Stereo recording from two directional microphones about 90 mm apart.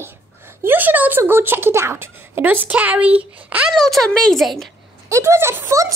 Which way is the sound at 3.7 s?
Centre (ahead or behind).